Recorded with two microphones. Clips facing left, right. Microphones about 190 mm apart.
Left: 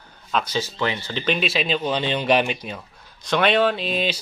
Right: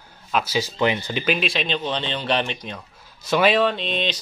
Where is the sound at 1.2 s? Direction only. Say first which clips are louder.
Left 2 dB; centre (ahead or behind).